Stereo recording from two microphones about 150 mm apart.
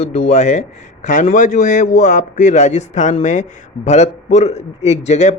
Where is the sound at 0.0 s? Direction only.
45° left (ahead or behind).